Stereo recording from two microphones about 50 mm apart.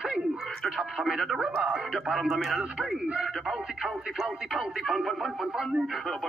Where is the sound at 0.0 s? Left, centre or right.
Centre.